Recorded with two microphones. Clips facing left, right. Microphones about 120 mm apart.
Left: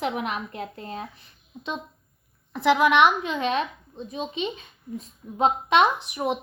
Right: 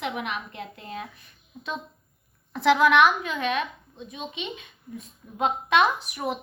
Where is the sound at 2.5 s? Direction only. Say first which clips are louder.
Even; 10° left (ahead or behind).